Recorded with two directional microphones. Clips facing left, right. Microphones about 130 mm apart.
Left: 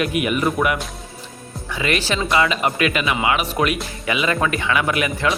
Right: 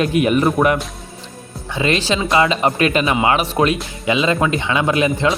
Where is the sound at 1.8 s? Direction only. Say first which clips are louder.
Right 4 dB; 25° right (ahead or behind).